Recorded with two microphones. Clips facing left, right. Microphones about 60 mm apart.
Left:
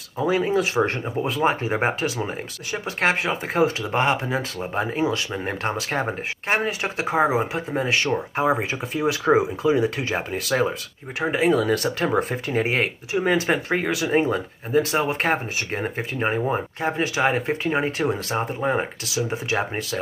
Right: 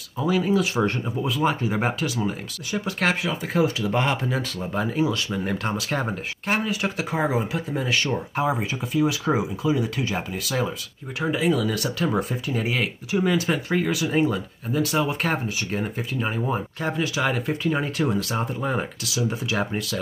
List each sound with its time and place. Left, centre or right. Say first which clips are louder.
0.2 s speech: left 1 dB; left